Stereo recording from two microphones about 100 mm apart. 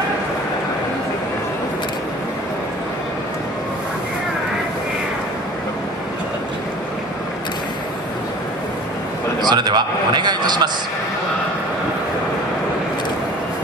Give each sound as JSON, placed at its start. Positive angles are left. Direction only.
{"t": 9.4, "sound": "a man's voice", "side_deg": -45}